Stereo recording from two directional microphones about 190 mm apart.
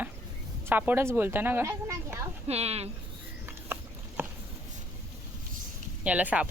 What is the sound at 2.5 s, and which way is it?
Speech, 35° right (ahead or behind).